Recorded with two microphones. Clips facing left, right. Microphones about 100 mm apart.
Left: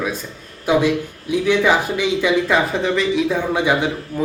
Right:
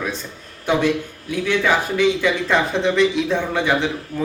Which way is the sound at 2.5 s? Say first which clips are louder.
Left 1 dB; centre (ahead or behind).